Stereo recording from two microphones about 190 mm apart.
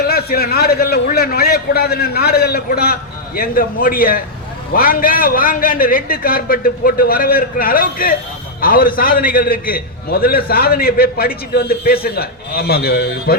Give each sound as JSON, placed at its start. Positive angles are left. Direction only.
{"t": 0.0, "sound": "a man's voice", "side_deg": 55}